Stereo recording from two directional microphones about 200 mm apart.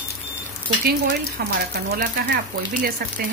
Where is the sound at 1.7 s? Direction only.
50° right (ahead or behind).